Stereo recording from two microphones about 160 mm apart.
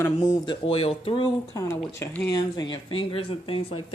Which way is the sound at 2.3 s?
25° left (ahead or behind).